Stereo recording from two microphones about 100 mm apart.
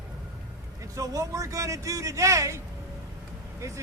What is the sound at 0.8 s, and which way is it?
A man's voice, 35° right (ahead or behind).